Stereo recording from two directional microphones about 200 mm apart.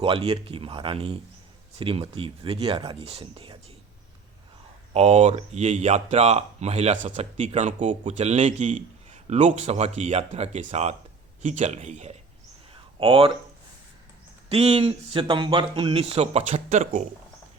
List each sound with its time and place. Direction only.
0.0 s speech: 30° right (ahead or behind)
4.9 s speech: 35° right (ahead or behind)
12.7 s a sound: 25° right (ahead or behind)
14.5 s speech: 30° right (ahead or behind)